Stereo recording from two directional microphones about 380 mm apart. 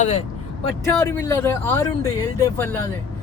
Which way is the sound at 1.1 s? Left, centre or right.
Centre.